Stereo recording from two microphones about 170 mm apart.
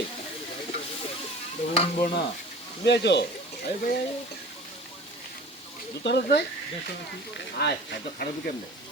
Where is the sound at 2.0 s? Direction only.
60° left (ahead or behind).